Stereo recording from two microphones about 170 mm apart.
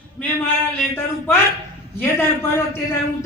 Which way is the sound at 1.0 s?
15° left (ahead or behind).